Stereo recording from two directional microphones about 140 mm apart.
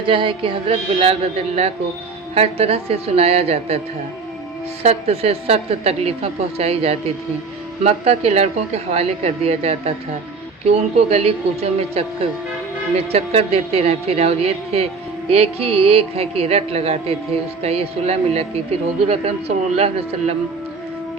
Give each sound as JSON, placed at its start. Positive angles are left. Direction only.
{"t": 0.1, "sound": "a woman's voice", "side_deg": -40}
{"t": 4.8, "sound": "a woman's voice", "side_deg": -45}
{"t": 13.1, "sound": "a woman's voice", "side_deg": -45}